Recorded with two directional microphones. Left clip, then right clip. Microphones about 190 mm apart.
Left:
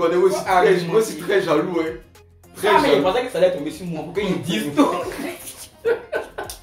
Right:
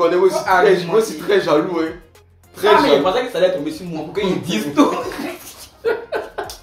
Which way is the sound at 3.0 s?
5° left (ahead or behind).